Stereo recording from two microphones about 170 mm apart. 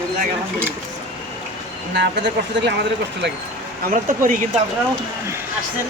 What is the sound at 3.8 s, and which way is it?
Speech, 55° right (ahead or behind).